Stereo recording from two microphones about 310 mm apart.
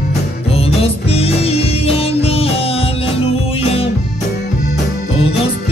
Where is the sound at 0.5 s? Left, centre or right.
Centre.